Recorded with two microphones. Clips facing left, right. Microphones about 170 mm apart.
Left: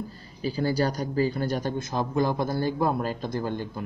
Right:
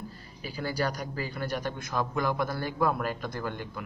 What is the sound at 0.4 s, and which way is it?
A man's voice, 30° left (ahead or behind).